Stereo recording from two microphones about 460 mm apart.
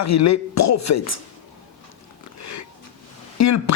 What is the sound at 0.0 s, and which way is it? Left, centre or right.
Speech, left.